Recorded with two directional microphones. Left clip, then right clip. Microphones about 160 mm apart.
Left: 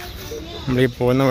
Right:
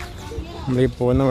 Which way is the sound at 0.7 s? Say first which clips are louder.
Left 1 dB; 5° right (ahead or behind).